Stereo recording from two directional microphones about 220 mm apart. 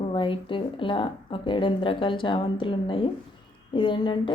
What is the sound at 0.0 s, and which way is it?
Speech, 25° left (ahead or behind).